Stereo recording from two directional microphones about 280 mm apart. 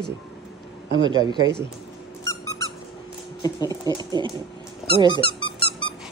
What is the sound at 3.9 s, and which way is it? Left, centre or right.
Speech, centre.